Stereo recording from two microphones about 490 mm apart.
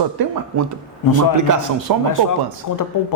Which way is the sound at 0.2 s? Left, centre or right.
Right.